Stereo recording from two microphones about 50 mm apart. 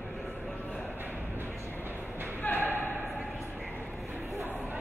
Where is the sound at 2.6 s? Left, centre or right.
Left.